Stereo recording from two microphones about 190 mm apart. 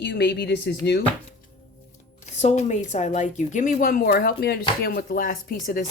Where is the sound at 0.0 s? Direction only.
60° left (ahead or behind).